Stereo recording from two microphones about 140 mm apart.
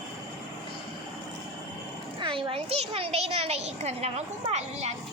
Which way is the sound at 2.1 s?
35° right (ahead or behind).